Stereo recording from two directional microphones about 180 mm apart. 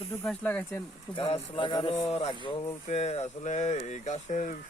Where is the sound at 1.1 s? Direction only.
30° left (ahead or behind).